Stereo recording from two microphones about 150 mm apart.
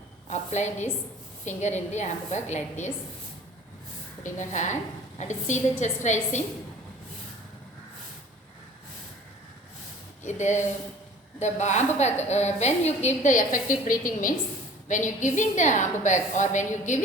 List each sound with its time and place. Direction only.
0.3 s a woman's voice: 50° left (ahead or behind)
4.2 s a woman's voice: 55° left (ahead or behind)
10.2 s a woman's voice: 50° left (ahead or behind)